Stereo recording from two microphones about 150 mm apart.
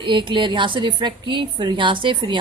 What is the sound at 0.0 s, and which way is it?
A woman's voice, 35° right (ahead or behind).